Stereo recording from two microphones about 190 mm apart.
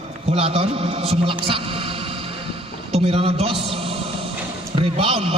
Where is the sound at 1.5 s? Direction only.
30° right (ahead or behind).